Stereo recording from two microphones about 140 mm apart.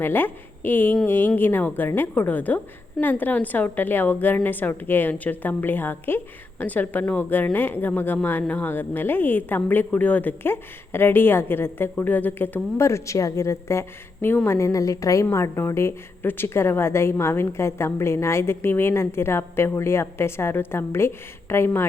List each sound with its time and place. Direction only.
0.0 s a woman's voice: 15° left (ahead or behind)